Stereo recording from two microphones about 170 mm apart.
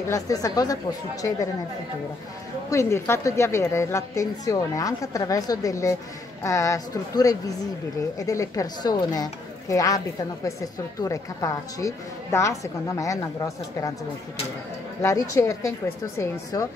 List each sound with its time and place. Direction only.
0.1 s a woman's voice: 20° left (ahead or behind)
2.7 s a woman's voice: 15° left (ahead or behind)
15.0 s a woman's voice: 15° left (ahead or behind)